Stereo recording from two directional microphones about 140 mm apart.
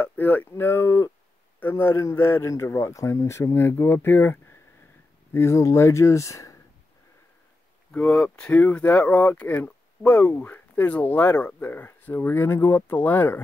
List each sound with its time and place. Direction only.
0.0 s speech: 10° left (ahead or behind)
7.9 s speech: 10° left (ahead or behind)